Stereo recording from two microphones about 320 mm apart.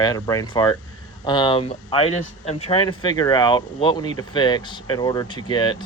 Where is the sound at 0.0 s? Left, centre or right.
Centre.